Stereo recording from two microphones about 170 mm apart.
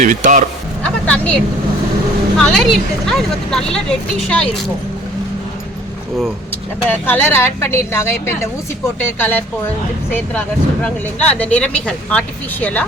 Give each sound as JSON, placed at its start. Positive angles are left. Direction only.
{"t": 0.0, "sound": "speech", "side_deg": -50}
{"t": 0.8, "sound": "a sound", "side_deg": 10}
{"t": 2.4, "sound": "speech", "side_deg": 0}
{"t": 6.8, "sound": "speech", "side_deg": 10}